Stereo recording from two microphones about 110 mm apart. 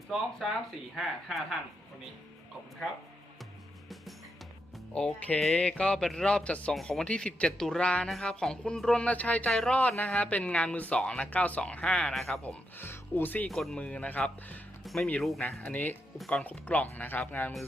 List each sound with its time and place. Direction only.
0.9 s speech: centre (ahead or behind)
4.9 s speech: 10° left (ahead or behind)
12.4 s speech: 15° left (ahead or behind)
13.5 s speech: centre (ahead or behind)
13.7 s speech: 10° left (ahead or behind)
14.8 s music: centre (ahead or behind)
15.2 s speech: centre (ahead or behind)
15.6 s speech: 15° left (ahead or behind)
16.1 s speech: centre (ahead or behind)
16.4 s speech: 15° left (ahead or behind)